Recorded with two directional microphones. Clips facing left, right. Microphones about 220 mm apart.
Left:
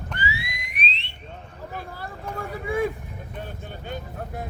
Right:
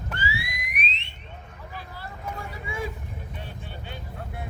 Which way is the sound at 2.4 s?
55° left (ahead or behind).